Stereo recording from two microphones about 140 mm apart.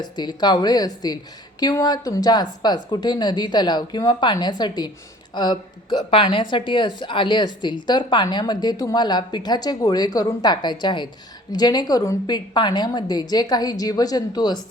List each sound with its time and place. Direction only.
0.0 s a woman's voice: 30° left (ahead or behind)